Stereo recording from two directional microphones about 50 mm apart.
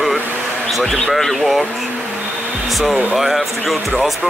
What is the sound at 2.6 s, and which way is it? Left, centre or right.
Hair dryer, centre.